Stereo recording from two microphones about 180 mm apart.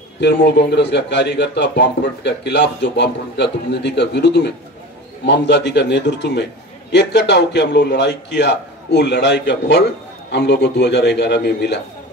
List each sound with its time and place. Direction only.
0.2 s a man's voice: 70° left (ahead or behind)